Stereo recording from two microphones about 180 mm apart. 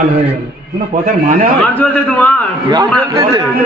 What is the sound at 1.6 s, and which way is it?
Speech, 10° left (ahead or behind).